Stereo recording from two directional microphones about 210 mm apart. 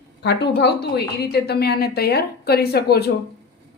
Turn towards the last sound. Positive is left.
turn(degrees=50)  # may be behind; listen again after turning